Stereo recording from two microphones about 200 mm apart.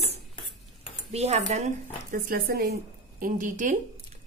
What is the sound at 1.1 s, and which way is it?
Speech, 35° right (ahead or behind).